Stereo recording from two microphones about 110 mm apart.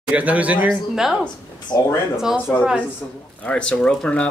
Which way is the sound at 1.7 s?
40° left (ahead or behind).